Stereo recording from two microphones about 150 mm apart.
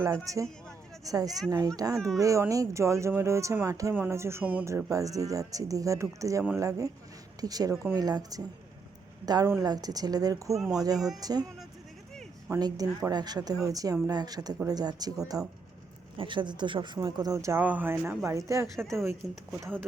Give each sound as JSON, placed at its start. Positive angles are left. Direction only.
{"t": 0.0, "sound": "a woman's voice", "side_deg": -20}
{"t": 12.5, "sound": "a woman's voice", "side_deg": -25}